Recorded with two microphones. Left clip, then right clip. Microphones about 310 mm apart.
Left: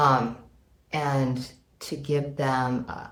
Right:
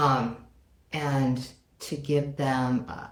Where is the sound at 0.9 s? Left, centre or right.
Centre.